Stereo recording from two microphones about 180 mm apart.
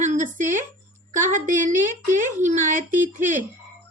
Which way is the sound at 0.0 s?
40° right (ahead or behind).